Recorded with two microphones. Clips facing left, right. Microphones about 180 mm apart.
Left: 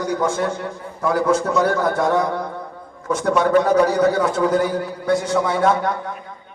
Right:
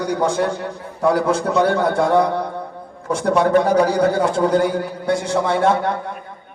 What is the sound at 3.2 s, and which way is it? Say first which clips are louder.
Speech: right 1 dB; 30° right (ahead or behind).